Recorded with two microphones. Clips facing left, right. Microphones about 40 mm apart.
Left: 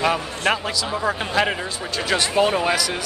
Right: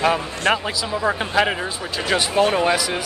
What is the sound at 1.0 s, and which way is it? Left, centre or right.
Speech, centre.